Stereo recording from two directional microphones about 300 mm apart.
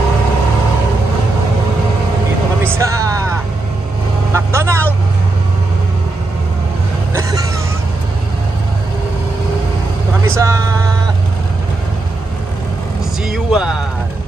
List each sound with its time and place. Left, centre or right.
2.6 s vehicle: centre
4.3 s vehicle: centre
7.2 s vehicle: centre
10.2 s vehicle: centre
13.3 s a sound: centre